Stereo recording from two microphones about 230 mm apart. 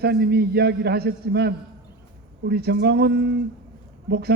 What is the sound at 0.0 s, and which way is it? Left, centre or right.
A man's voice, right.